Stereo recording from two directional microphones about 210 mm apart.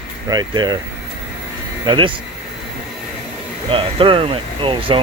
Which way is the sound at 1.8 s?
25° right (ahead or behind).